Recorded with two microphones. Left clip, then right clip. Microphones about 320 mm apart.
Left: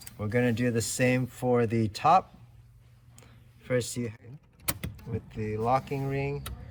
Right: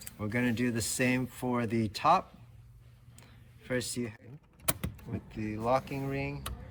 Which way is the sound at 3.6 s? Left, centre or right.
Centre.